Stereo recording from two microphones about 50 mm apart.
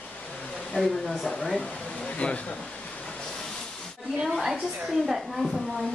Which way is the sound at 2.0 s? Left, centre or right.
Left.